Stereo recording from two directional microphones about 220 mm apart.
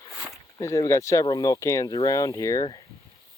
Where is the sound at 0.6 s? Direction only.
15° left (ahead or behind).